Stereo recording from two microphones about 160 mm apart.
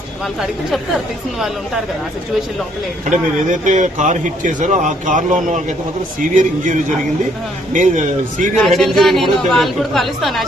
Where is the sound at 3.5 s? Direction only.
50° right (ahead or behind).